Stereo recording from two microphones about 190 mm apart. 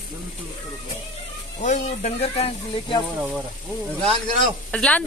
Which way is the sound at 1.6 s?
40° left (ahead or behind).